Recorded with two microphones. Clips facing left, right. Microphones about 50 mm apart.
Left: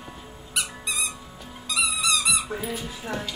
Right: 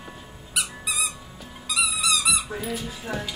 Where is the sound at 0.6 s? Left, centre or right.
Centre.